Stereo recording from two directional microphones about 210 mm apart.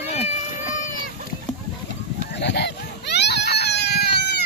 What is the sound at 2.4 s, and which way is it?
Baby cry, 55° left (ahead or behind).